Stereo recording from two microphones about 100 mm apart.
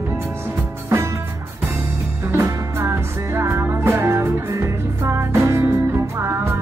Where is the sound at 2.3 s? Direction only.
30° right (ahead or behind).